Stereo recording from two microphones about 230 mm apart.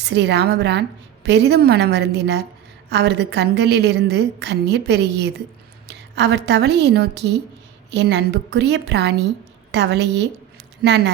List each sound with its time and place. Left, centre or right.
0.0 s a woman's voice: right